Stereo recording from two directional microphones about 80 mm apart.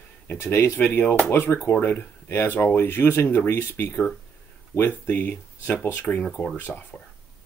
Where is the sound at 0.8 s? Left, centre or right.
Left.